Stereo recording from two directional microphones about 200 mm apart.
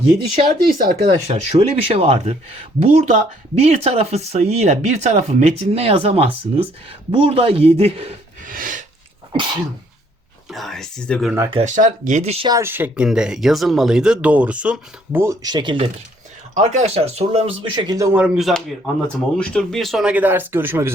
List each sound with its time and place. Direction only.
0.6 s speech: 50° right (ahead or behind)
1.0 s speech: 35° right (ahead or behind)
8.4 s a sound: 45° right (ahead or behind)
10.5 s speech: centre (ahead or behind)
11.5 s speech: 35° right (ahead or behind)
12.5 s speech: 15° right (ahead or behind)
16.6 s speech: 35° right (ahead or behind); by 20.9 s 10° right (ahead or behind)